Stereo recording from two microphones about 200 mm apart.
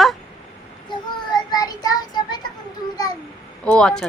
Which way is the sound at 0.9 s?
20° left (ahead or behind).